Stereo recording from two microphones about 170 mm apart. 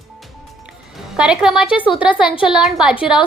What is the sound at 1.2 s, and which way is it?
A woman's voice, 5° right (ahead or behind).